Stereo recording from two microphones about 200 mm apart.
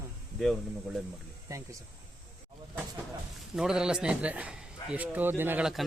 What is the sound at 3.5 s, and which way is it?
A man's voice, 5° right (ahead or behind).